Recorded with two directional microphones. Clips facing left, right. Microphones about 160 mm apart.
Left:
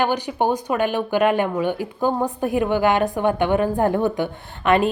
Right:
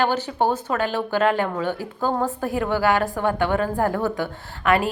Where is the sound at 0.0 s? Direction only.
15° left (ahead or behind).